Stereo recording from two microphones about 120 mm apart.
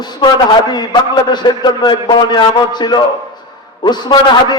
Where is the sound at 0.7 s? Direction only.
35° left (ahead or behind).